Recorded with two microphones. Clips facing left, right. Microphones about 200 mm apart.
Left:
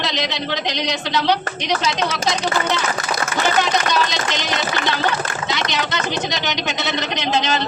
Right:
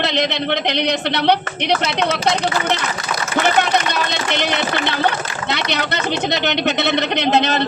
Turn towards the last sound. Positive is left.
turn(degrees=-60)  # may be behind; listen again after turning